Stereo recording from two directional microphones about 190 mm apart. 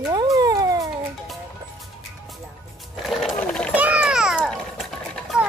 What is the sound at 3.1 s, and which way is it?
Sewing machine, centre (ahead or behind).